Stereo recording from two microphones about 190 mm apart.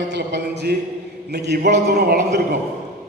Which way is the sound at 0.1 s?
65° right (ahead or behind).